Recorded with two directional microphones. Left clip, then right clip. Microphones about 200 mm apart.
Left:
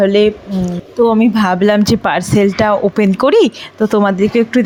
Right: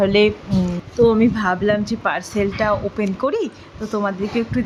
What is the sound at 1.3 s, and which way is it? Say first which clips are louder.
Speech: left 6 dB; 30° left (ahead or behind).